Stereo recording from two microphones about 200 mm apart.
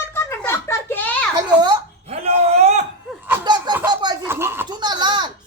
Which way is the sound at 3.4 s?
20° right (ahead or behind).